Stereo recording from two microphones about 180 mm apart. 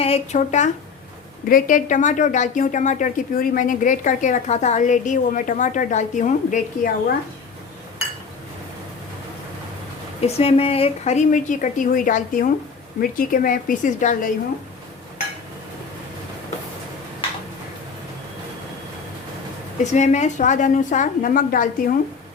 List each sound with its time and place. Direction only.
0.0 s a woman's voice: 35° left (ahead or behind)
10.2 s a woman's voice: 35° left (ahead or behind)
19.8 s a woman's voice: 40° left (ahead or behind)